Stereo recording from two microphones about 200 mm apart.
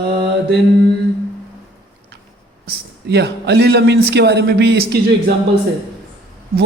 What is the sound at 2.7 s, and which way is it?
A man's voice, 55° right (ahead or behind).